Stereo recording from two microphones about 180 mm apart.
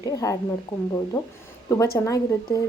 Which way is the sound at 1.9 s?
15° left (ahead or behind).